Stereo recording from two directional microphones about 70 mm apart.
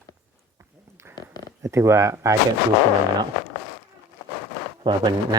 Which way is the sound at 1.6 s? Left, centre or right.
Right.